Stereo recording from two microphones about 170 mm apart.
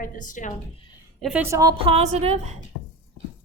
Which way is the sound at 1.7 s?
35° right (ahead or behind).